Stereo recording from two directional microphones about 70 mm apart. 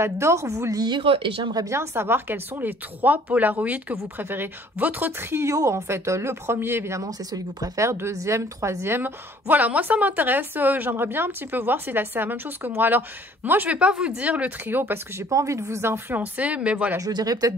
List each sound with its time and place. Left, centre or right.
0.0 s a woman's voice: right
1.7 s a woman's voice: right
5.3 s a woman's voice: right
7.0 s speech: right
7.8 s a woman's voice: right
15.2 s a woman's voice: right
16.1 s a woman's voice: right
17.0 s speech: right